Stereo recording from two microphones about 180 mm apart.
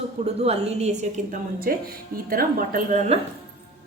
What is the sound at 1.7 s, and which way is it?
Speech, 55° right (ahead or behind).